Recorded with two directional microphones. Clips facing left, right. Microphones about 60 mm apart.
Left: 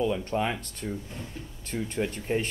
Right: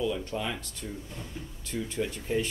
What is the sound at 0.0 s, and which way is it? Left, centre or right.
Speech, left.